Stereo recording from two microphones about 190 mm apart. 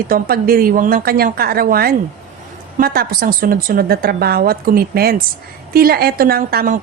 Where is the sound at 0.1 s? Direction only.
50° right (ahead or behind).